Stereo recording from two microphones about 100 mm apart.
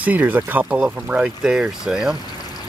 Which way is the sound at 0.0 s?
15° right (ahead or behind).